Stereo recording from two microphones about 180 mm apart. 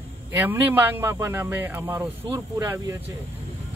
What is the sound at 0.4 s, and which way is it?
Speech, 10° right (ahead or behind).